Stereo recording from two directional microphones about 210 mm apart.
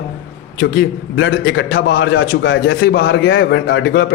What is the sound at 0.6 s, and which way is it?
A man's voice, 65° left (ahead or behind).